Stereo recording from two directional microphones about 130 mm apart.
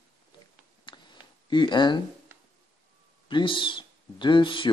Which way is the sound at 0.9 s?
40° left (ahead or behind).